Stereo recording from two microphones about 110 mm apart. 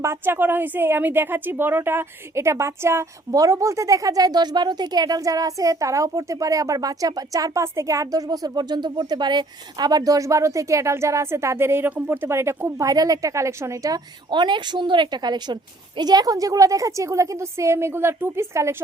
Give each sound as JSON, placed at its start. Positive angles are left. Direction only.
{"t": 0.0, "sound": "a woman's voice", "side_deg": -25}
{"t": 14.3, "sound": "a woman's voice", "side_deg": -45}